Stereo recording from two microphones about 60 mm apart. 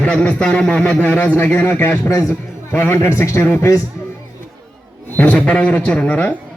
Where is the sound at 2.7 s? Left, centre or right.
Left.